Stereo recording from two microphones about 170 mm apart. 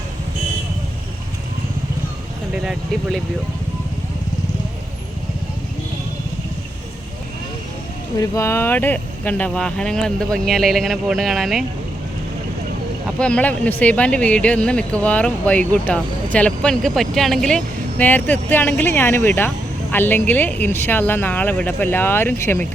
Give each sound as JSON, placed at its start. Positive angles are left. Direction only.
{"t": 8.2, "sound": "speech", "side_deg": 15}
{"t": 13.1, "sound": "speech", "side_deg": 5}